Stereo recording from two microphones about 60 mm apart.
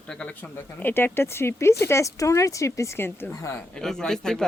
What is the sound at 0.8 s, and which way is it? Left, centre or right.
Speech, left.